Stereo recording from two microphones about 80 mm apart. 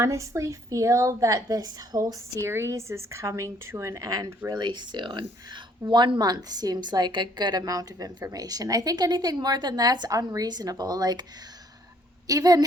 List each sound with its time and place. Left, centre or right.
0.0 s a woman's voice: right
2.5 s a woman's voice: right
4.4 s a woman's voice: right
12.3 s a woman's voice: right